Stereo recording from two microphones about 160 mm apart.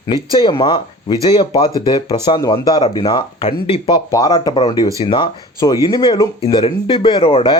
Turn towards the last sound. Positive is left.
turn(degrees=35)  # may be behind; listen again after turning